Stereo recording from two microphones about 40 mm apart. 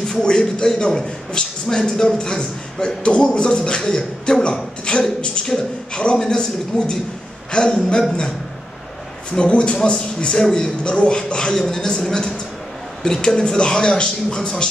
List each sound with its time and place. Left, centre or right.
0.1 s a man's voice: centre
9.3 s a man's voice: left